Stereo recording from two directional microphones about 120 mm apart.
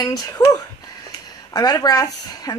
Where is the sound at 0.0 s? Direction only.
30° left (ahead or behind).